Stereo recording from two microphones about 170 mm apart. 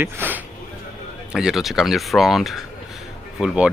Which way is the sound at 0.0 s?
10° right (ahead or behind).